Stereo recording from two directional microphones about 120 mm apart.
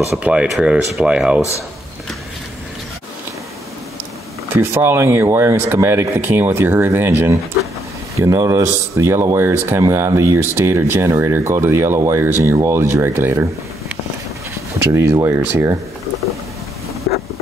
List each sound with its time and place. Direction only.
0.1 s speech: 10° right (ahead or behind)
4.5 s speech: 20° right (ahead or behind)
14.8 s speech: 25° right (ahead or behind)